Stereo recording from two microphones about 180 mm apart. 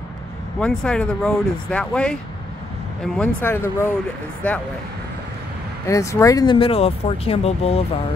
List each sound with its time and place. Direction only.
0.6 s speech: 5° left (ahead or behind)
5.9 s speech: 15° left (ahead or behind); by 7.8 s 35° left (ahead or behind)